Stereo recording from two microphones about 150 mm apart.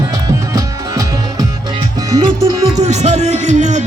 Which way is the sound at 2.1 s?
45° right (ahead or behind).